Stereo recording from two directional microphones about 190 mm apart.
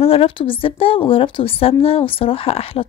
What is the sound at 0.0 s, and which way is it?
A woman's voice, 30° left (ahead or behind).